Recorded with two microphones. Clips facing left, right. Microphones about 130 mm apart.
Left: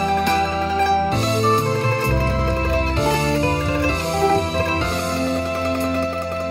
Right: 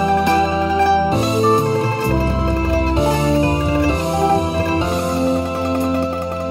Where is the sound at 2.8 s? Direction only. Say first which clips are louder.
Right 3 dB; 10° right (ahead or behind).